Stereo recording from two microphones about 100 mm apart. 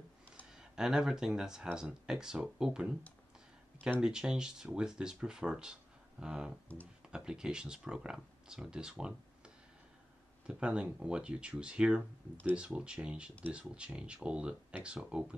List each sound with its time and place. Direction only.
0.6 s speech: 5° right (ahead or behind)
4.0 s speech: 5° right (ahead or behind)